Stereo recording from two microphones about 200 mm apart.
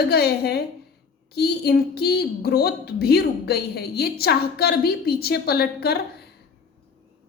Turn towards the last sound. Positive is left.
turn(degrees=50)  # may be behind; listen again after turning